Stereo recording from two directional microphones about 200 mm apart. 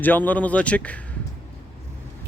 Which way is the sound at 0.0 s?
10° left (ahead or behind).